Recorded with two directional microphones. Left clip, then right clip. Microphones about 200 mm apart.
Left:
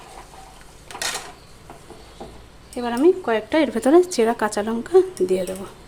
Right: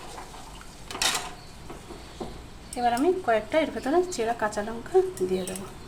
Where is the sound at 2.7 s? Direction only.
45° left (ahead or behind); by 5.0 s 60° left (ahead or behind).